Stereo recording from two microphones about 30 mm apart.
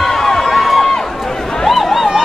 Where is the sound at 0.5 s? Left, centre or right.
Centre.